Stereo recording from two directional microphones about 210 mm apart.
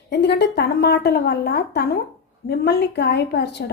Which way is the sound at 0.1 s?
50° left (ahead or behind).